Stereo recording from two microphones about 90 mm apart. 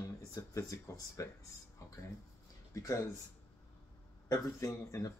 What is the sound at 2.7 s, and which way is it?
Speech, 35° left (ahead or behind).